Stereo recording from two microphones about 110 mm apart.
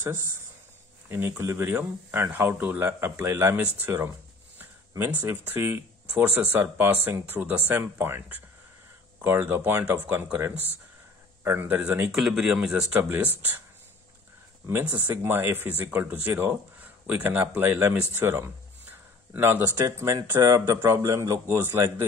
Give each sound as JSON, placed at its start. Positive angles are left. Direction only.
{"t": 0.0, "sound": "a man's voice", "side_deg": -20}
{"t": 1.0, "sound": "a sound", "side_deg": -20}
{"t": 1.4, "sound": "speech", "side_deg": -20}
{"t": 12.9, "sound": "speech", "side_deg": -15}
{"t": 15.2, "sound": "a man's voice", "side_deg": -20}